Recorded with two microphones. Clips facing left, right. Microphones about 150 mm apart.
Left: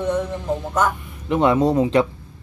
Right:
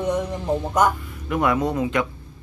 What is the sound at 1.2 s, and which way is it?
Speech, 25° left (ahead or behind).